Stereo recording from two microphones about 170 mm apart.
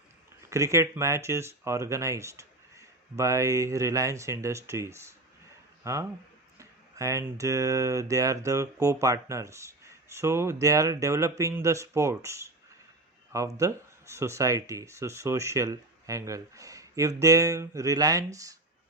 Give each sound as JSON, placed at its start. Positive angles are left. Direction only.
{"t": 0.5, "sound": "speech", "side_deg": -15}